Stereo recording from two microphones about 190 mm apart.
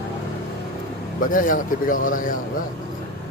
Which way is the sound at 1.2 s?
45° left (ahead or behind).